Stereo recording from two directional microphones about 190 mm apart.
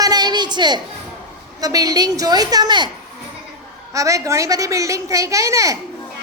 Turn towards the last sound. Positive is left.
turn(degrees=-15)  # may be behind; listen again after turning